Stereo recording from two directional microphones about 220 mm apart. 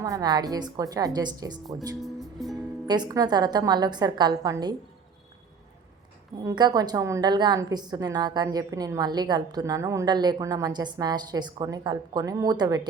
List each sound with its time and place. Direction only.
0.0 s a woman's voice: 15° right (ahead or behind)
2.8 s a woman's voice: 20° right (ahead or behind)
6.4 s a woman's voice: 20° right (ahead or behind)